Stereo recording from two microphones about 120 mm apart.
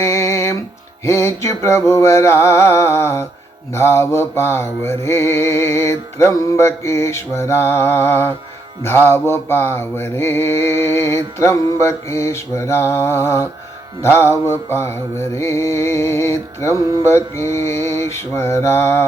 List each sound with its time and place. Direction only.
0.0 s music: 25° left (ahead or behind)
1.0 s mantra: 20° left (ahead or behind)